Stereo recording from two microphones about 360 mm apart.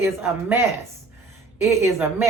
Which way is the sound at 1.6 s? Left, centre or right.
Centre.